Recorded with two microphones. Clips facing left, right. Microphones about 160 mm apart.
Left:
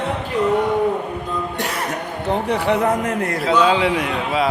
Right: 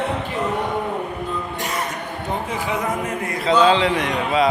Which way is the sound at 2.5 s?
75° left (ahead or behind).